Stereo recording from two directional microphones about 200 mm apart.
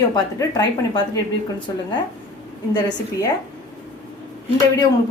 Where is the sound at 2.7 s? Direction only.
20° left (ahead or behind).